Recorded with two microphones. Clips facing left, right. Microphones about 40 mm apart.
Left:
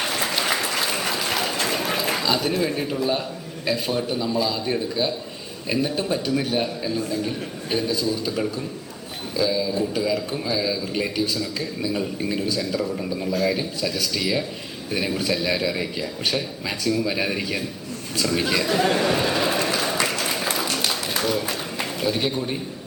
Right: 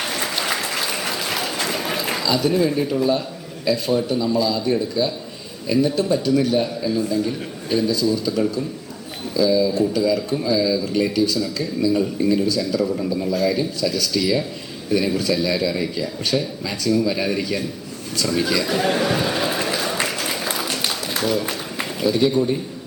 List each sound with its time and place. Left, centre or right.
0.0 s applause: centre
2.2 s a man's voice: left
2.5 s a man's voice: centre
3.0 s a man's voice: left
9.3 s a man's voice: left
18.7 s a sound: centre
20.0 s applause: centre
20.7 s a sound: centre
22.1 s a man's voice: left